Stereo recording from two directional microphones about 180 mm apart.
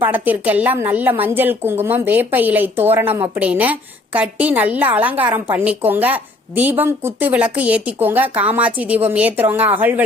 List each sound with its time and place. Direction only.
0.0 s a woman's voice: 10° right (ahead or behind)